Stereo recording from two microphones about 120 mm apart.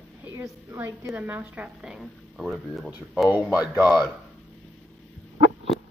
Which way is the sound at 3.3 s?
15° right (ahead or behind).